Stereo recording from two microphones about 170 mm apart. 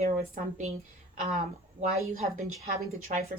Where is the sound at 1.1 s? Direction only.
50° right (ahead or behind).